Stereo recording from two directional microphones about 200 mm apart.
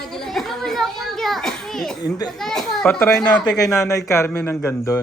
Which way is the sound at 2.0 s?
20° left (ahead or behind).